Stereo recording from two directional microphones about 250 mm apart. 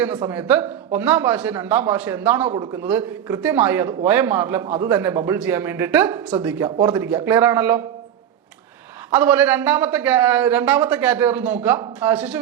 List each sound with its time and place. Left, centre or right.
0.0 s a man's voice: centre
6.7 s a man's voice: centre
9.1 s a man's voice: centre